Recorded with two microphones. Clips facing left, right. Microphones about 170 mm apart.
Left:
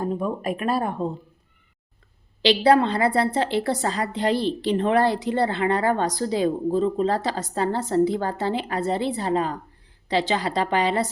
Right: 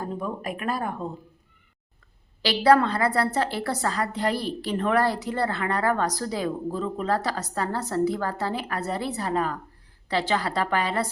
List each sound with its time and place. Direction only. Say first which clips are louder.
0.0 s a woman's voice: left 5 dB; 20° left (ahead or behind)
2.4 s a woman's voice: left 2 dB; 20° left (ahead or behind)